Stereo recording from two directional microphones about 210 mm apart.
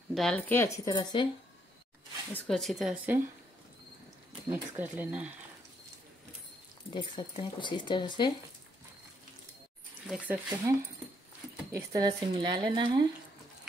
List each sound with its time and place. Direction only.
0.1 s speech: 5° left (ahead or behind); by 1.3 s 20° left (ahead or behind)
2.3 s speech: centre (ahead or behind)
4.5 s speech: 10° right (ahead or behind)
6.9 s speech: 20° left (ahead or behind)
10.0 s speech: 5° right (ahead or behind)
11.7 s speech: 20° right (ahead or behind)